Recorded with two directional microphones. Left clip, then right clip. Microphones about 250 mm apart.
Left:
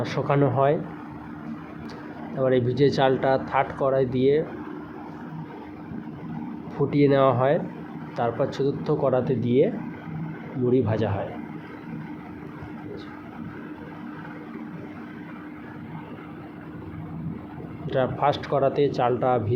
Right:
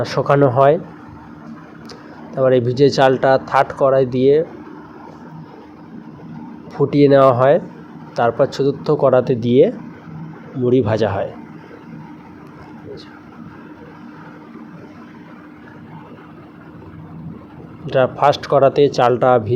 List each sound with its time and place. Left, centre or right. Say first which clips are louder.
0.0 s speech: right 9 dB; centre
2.3 s speech: right 8 dB; centre
6.7 s speech: right 9 dB; centre
17.8 s speech: right 9 dB; centre